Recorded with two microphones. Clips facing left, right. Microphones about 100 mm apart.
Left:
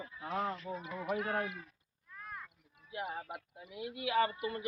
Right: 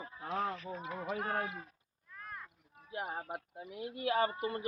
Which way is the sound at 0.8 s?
30° right (ahead or behind).